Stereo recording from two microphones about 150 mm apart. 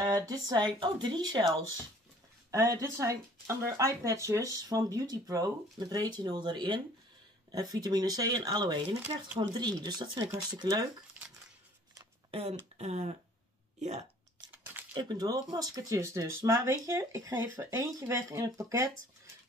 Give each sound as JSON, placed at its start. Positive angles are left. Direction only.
{"t": 0.0, "sound": "speech", "side_deg": -25}
{"t": 2.5, "sound": "speech", "side_deg": -20}
{"t": 12.3, "sound": "speech", "side_deg": -45}
{"t": 14.5, "sound": "a sound", "side_deg": -10}
{"t": 15.0, "sound": "speech", "side_deg": -30}